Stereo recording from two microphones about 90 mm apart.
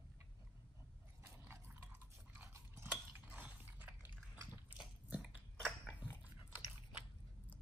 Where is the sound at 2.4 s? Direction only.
30° right (ahead or behind).